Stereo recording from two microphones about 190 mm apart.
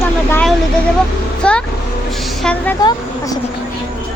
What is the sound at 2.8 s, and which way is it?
Speech, 20° left (ahead or behind).